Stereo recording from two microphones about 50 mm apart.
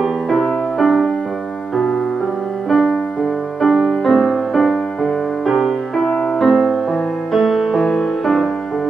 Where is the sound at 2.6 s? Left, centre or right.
Centre.